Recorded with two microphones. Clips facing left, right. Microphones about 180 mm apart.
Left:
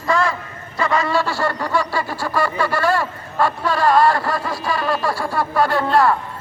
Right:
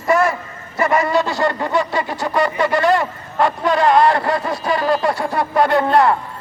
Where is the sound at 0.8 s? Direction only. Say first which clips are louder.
Right 3 dB; 20° right (ahead or behind).